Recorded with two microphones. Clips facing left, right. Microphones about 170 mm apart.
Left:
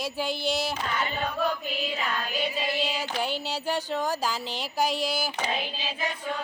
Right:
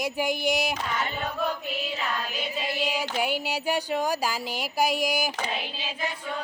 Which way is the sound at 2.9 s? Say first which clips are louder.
Right 2 dB; 10° right (ahead or behind).